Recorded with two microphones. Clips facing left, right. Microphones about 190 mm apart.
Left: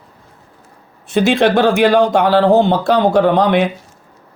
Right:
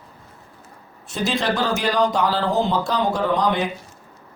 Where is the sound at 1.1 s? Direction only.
60° left (ahead or behind).